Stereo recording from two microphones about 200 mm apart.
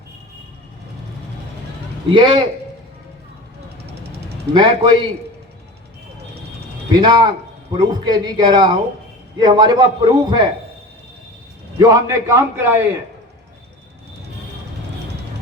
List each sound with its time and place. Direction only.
2.1 s a man's voice: 25° right (ahead or behind)
4.5 s a man's voice: 25° right (ahead or behind)
6.9 s a man's voice: 20° right (ahead or behind)
11.8 s a man's voice: 15° right (ahead or behind)